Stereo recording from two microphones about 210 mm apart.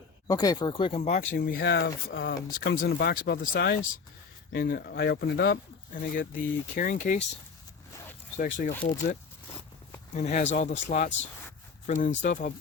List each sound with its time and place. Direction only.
0.3 s speech: 20° left (ahead or behind); by 2.3 s 55° left (ahead or behind)
2.3 s speech: 45° left (ahead or behind)
8.4 s speech: 40° left (ahead or behind)
10.2 s speech: 35° left (ahead or behind)